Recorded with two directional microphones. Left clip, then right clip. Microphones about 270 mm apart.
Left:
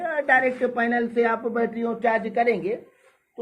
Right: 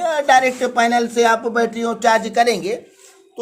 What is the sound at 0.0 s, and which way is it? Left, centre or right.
Speech, centre.